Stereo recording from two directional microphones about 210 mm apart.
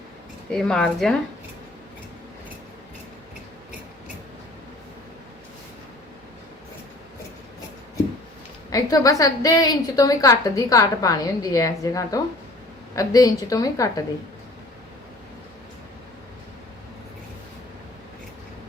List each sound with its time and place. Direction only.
0.5 s a woman's voice: 5° left (ahead or behind)
8.7 s a woman's voice: 15° left (ahead or behind)